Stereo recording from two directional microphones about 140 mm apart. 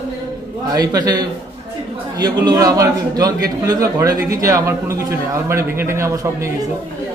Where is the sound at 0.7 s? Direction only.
25° right (ahead or behind).